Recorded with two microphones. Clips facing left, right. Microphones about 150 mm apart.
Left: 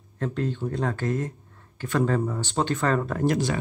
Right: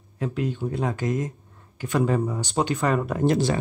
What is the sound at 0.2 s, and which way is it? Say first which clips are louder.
Speech: right 1 dB; 10° right (ahead or behind).